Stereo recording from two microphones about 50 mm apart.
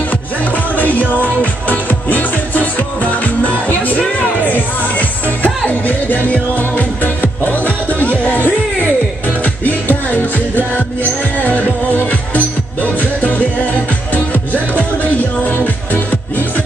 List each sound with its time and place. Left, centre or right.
0.7 s music: left